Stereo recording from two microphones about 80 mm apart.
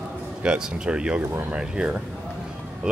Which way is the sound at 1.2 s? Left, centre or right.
Right.